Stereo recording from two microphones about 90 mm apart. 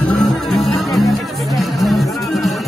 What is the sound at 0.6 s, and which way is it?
Music, centre (ahead or behind).